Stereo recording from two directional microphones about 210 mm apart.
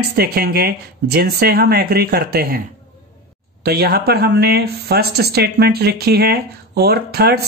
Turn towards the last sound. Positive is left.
turn(degrees=-50)  # may be behind; listen again after turning